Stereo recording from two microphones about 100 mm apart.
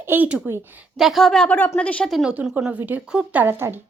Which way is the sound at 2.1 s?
10° right (ahead or behind).